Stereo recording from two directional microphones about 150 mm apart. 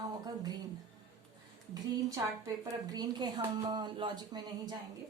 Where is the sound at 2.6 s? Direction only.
25° right (ahead or behind).